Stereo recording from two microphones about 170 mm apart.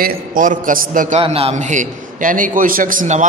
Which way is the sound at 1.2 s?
35° right (ahead or behind).